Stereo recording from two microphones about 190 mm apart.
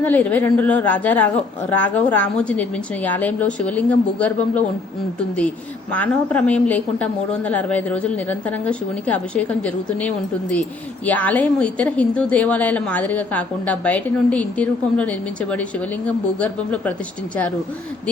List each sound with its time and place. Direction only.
0.0 s speech: 10° left (ahead or behind)
5.9 s speech: 5° left (ahead or behind)